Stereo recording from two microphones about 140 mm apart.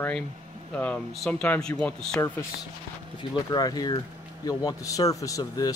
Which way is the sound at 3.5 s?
30° left (ahead or behind).